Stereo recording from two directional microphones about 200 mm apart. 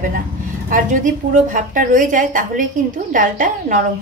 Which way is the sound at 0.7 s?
40° right (ahead or behind).